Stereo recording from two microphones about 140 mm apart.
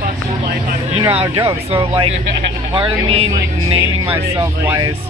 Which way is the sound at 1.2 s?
40° right (ahead or behind).